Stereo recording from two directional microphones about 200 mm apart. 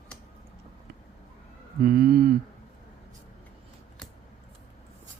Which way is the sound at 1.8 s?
45° right (ahead or behind).